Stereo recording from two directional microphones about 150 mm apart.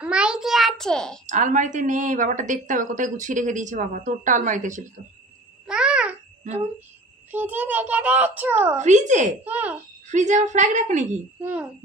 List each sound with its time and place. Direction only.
0.0 s a child's voice: 5° right (ahead or behind)
1.2 s a woman's voice: 55° right (ahead or behind)
5.7 s babbling: 5° right (ahead or behind)
7.2 s a child's voice: 10° right (ahead or behind)
8.7 s a woman's voice: 50° right (ahead or behind)
9.4 s a child's voice: 10° right (ahead or behind)
10.0 s a woman's voice: 50° right (ahead or behind)